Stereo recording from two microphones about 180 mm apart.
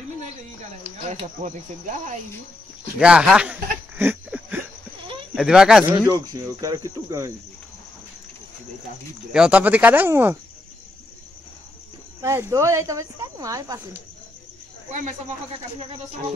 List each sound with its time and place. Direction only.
0.9 s speech: 40° right (ahead or behind)
3.0 s speech: 5° right (ahead or behind)
3.9 s a sound: 10° right (ahead or behind)
5.3 s speech: 5° right (ahead or behind)
6.0 s speech: 20° right (ahead or behind)
9.3 s speech: 5° right (ahead or behind)
12.2 s speech: 15° right (ahead or behind)